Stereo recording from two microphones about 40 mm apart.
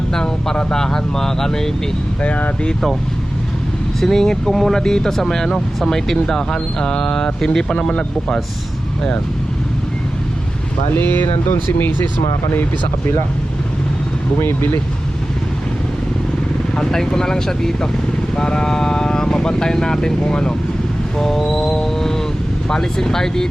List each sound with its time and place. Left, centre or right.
0.1 s speech: centre
2.2 s speech: left
4.0 s speech: centre
10.9 s speech: left
16.7 s speech: centre
21.2 s speech: centre
21.5 s music: centre
22.7 s speech: centre